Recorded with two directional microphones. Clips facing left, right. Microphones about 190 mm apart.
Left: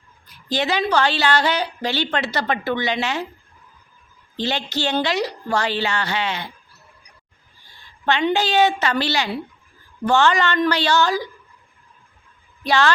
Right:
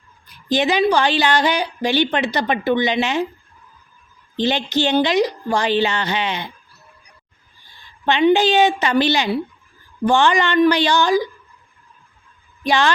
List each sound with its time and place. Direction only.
0.4 s a woman's voice: 15° right (ahead or behind)
4.4 s a woman's voice: 20° right (ahead or behind)
8.0 s a woman's voice: 15° right (ahead or behind)
12.6 s a woman's voice: 15° right (ahead or behind)